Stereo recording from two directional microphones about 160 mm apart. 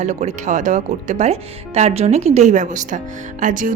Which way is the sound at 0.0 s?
45° right (ahead or behind).